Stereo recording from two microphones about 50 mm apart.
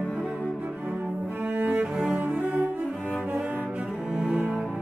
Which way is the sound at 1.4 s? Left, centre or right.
Right.